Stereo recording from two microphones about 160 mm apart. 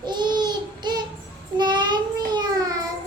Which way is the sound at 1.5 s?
30° right (ahead or behind).